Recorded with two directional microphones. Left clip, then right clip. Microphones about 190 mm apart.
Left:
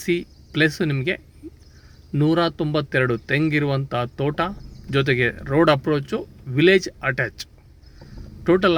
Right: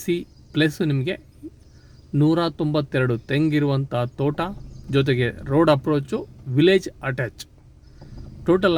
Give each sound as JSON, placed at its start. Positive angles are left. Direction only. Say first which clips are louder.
{"t": 0.0, "sound": "speech", "louder": "left 2 dB", "side_deg": -5}
{"t": 8.4, "sound": "speech", "louder": "left 1 dB", "side_deg": -5}